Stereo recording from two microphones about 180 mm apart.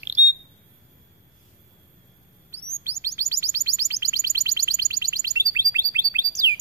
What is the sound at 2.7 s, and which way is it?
Chirp, 15° right (ahead or behind).